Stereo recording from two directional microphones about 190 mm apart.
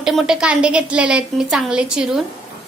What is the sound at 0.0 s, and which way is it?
A woman's voice, centre (ahead or behind).